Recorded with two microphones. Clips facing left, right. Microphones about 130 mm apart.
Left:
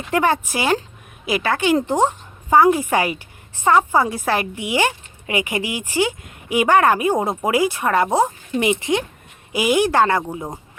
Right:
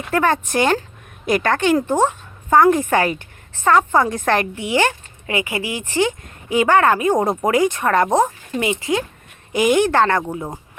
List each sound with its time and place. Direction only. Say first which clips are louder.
0.1 s a woman's voice: right 1 dB; 10° left (ahead or behind)
8.5 s speech: left 1 dB; 20° left (ahead or behind)
9.5 s speech: right 2 dB; 10° left (ahead or behind)